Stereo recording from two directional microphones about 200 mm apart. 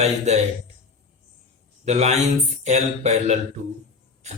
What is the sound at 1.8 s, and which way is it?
Speech, 35° right (ahead or behind).